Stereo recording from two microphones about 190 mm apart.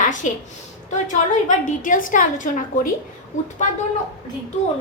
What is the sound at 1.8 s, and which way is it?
A woman's voice, 45° left (ahead or behind).